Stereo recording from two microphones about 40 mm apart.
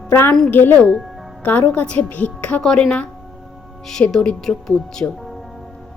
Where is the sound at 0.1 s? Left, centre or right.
Left.